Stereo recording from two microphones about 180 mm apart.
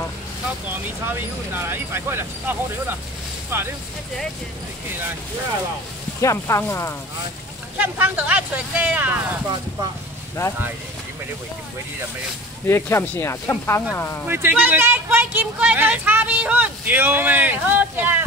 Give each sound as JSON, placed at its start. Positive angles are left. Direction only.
{"t": 1.0, "sound": "speech", "side_deg": -10}
{"t": 3.5, "sound": "speech", "side_deg": -10}
{"t": 6.2, "sound": "speech", "side_deg": 15}
{"t": 7.7, "sound": "speech", "side_deg": -10}
{"t": 12.6, "sound": "speech", "side_deg": 15}
{"t": 14.2, "sound": "speech", "side_deg": -10}